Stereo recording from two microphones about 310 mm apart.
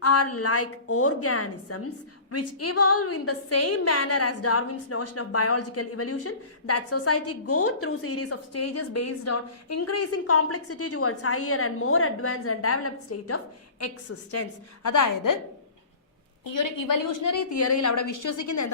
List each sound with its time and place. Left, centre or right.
0.0 s a woman's voice: left
14.8 s a woman's voice: left
16.4 s a woman's voice: left